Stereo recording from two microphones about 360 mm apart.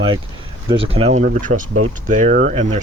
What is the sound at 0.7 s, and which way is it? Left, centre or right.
Speech, centre.